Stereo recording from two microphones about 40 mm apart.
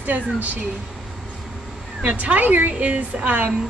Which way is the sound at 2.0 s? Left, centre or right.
Right.